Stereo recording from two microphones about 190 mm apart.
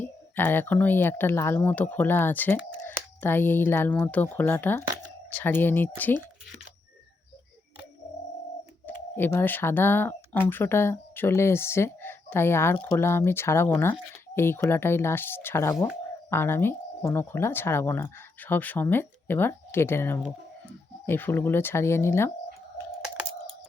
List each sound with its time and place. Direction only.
0.0 s speech: 10° left (ahead or behind)
9.1 s speech: 10° left (ahead or behind)